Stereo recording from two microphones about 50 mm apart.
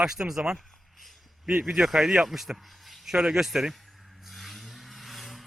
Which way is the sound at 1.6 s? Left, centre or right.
Centre.